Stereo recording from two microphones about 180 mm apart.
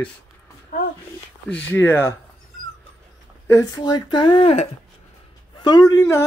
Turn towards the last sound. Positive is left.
turn(degrees=15)  # may be behind; listen again after turning